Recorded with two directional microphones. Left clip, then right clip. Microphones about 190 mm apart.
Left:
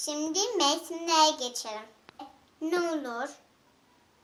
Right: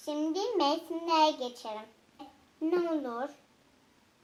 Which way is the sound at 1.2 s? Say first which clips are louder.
Left 4 dB; 25° left (ahead or behind).